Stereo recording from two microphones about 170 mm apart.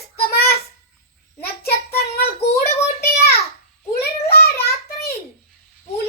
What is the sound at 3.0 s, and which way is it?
Child singing, 65° left (ahead or behind).